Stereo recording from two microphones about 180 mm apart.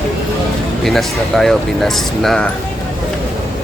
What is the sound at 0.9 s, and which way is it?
Speech, centre (ahead or behind).